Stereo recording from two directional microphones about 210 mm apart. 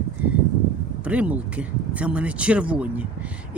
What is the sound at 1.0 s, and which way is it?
Speech, 5° right (ahead or behind).